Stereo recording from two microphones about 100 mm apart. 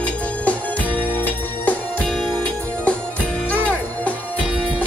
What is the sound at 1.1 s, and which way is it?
Music, 15° left (ahead or behind).